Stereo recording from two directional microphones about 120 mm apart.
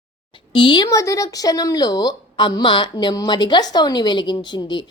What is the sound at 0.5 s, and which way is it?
Speech, 45° left (ahead or behind).